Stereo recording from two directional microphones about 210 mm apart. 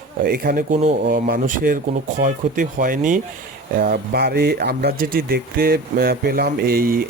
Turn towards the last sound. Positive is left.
turn(degrees=-45)  # may be behind; listen again after turning